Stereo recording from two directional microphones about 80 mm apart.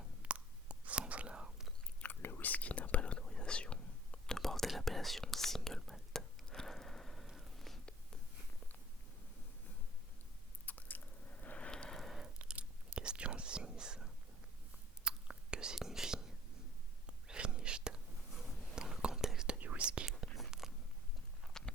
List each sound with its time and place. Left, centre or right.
0.2 s whispering: centre
2.2 s whispering: left; by 7.3 s centre
7.3 s a sound: centre
10.7 s squish: left; by 12.3 s centre
12.4 s whispering: centre
19.5 s whispering: centre
20.1 s whispering: centre
21.4 s walk: centre